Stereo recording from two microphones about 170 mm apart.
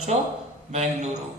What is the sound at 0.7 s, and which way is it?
Speech, 40° right (ahead or behind).